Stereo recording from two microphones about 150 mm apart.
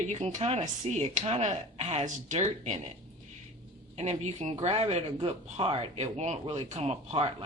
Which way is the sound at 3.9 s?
45° right (ahead or behind).